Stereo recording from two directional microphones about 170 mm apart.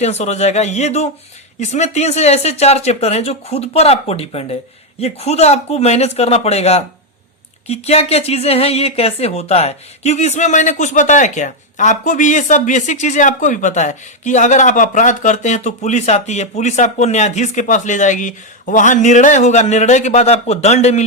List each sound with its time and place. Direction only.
0.0 s speech: 40° left (ahead or behind)